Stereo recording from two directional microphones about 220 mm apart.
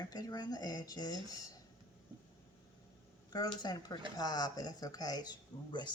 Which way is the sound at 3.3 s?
20° left (ahead or behind).